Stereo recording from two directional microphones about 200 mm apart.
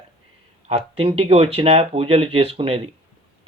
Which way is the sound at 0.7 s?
30° right (ahead or behind).